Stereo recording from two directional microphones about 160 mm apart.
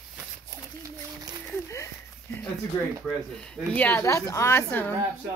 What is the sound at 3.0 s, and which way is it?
Speech, 5° left (ahead or behind).